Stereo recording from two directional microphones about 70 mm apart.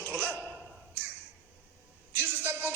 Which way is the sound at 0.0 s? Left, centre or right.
Right.